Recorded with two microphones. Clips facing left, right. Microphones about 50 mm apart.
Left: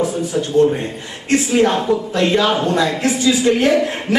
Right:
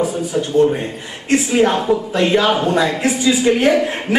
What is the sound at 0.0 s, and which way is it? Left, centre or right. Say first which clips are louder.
A man's voice: even; centre.